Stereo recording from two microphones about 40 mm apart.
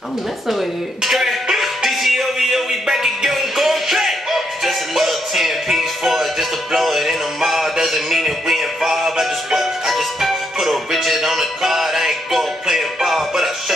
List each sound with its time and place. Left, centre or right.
0.5 s music: centre